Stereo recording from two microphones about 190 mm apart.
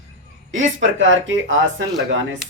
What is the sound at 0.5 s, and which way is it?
Speech, 85° right.